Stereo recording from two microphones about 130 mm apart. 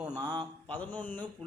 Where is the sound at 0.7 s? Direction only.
10° left (ahead or behind).